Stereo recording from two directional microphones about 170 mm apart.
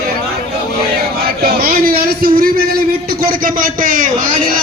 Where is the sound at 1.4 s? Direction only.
60° right (ahead or behind).